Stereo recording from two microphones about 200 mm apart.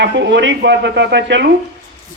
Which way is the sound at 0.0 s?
65° right (ahead or behind).